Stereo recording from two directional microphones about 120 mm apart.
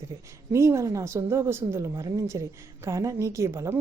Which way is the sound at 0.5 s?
25° right (ahead or behind).